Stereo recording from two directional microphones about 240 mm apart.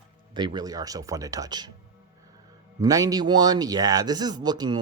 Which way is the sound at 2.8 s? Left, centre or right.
Centre.